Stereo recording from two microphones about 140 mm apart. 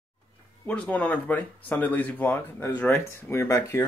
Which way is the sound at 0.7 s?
10° left (ahead or behind).